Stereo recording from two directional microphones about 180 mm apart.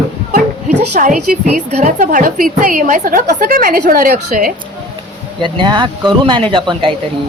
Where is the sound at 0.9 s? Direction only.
45° right (ahead or behind).